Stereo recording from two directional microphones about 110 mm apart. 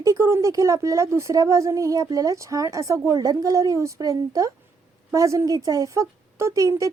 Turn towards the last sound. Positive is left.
turn(degrees=-30)  # may be behind; listen again after turning